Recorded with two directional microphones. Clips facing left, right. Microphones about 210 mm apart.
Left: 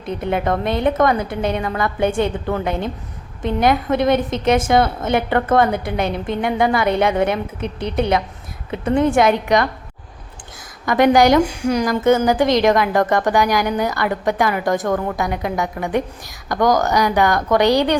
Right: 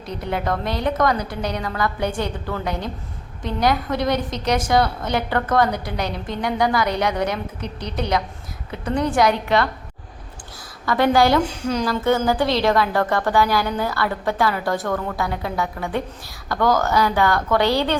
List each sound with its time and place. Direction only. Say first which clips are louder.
0.2 s a woman's voice: left 4 dB; 20° left (ahead or behind)
6.1 s a woman's voice: left 6 dB; 55° left (ahead or behind)
6.4 s a woman's voice: left 2 dB; 25° left (ahead or behind)
7.6 s a woman's voice: left 6 dB; 55° left (ahead or behind)
8.7 s a woman's voice: left 5 dB; 20° left (ahead or behind)
10.8 s a woman's voice: left 4 dB; 15° left (ahead or behind)